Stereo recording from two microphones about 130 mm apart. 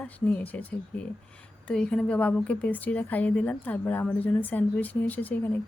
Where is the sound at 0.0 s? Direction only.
10° left (ahead or behind).